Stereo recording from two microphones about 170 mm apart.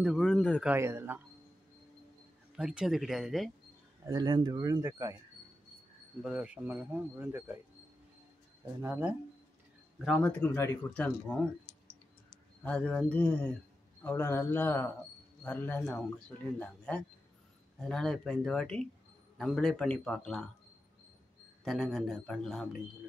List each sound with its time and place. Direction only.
0.0 s a man's voice: centre (ahead or behind)
0.7 s speech: 15° right (ahead or behind)
2.5 s a man's voice: 5° right (ahead or behind)
4.0 s speech: 20° right (ahead or behind)
6.2 s speech: 5° right (ahead or behind)
8.8 s a man's voice: 10° right (ahead or behind)
10.4 s speech: 15° left (ahead or behind)
11.7 s clicking: 80° left
12.6 s a man's voice: 10° left (ahead or behind)
21.6 s a man's voice: centre (ahead or behind)